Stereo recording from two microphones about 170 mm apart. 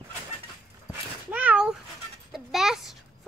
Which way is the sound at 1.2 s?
5° right (ahead or behind).